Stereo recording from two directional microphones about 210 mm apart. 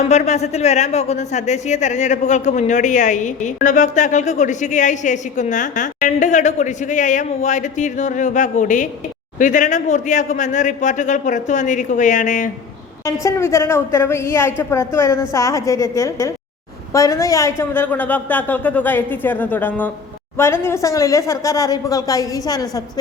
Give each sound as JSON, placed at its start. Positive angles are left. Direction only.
{"t": 0.1, "sound": "speech", "side_deg": 30}
{"t": 13.1, "sound": "a woman's voice", "side_deg": 15}